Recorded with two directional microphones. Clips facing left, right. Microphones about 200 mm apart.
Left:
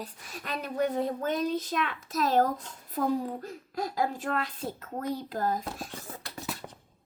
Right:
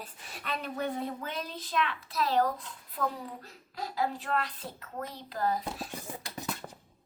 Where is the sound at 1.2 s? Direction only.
45° left (ahead or behind).